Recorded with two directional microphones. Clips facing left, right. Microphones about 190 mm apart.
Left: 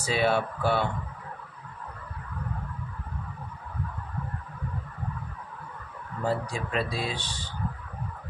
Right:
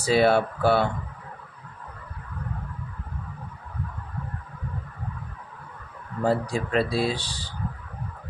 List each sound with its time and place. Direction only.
0.0 s speech: 35° right (ahead or behind)
6.2 s speech: 35° right (ahead or behind)